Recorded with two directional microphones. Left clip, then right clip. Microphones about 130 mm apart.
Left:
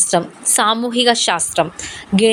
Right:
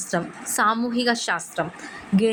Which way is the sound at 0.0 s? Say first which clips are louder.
Left 9 dB; 45° left (ahead or behind).